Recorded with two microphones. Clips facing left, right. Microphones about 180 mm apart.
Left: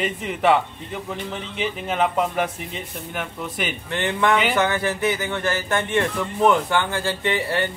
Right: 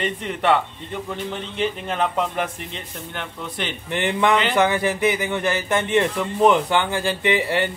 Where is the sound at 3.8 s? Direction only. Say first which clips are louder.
Right 2 dB; 15° right (ahead or behind).